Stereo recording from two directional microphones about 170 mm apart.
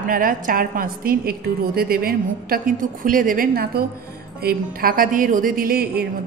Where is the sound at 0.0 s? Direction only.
55° right (ahead or behind).